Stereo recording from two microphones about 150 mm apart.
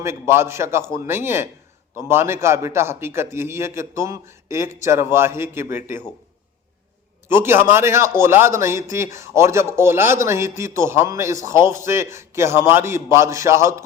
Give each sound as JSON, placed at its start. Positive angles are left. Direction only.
{"t": 0.0, "sound": "a man's voice", "side_deg": -15}
{"t": 7.3, "sound": "a man's voice", "side_deg": -15}